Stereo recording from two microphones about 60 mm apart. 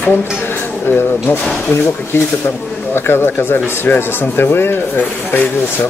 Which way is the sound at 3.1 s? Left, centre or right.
Left.